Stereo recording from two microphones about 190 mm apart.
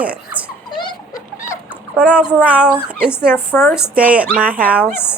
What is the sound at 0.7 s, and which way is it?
Dog, 25° left (ahead or behind).